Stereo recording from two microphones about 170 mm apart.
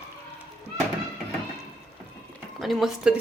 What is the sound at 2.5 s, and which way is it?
Speech, centre (ahead or behind).